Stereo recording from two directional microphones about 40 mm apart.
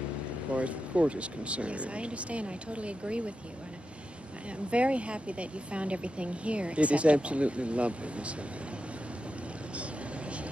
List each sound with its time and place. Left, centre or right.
0.6 s speech: right
4.6 s speech: right